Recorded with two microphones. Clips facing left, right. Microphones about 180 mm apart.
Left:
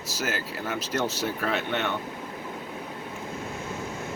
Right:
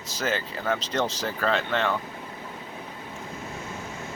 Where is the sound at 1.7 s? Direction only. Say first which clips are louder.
Right 3 dB; 90° right.